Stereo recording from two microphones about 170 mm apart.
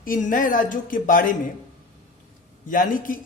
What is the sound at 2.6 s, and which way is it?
Speech, 50° left (ahead or behind).